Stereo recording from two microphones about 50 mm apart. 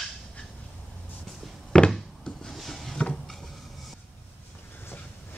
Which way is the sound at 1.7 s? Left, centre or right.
Centre.